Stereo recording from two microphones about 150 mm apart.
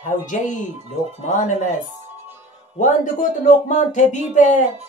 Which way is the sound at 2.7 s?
60° left (ahead or behind).